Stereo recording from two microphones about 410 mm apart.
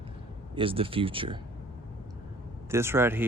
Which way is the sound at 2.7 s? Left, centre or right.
Centre.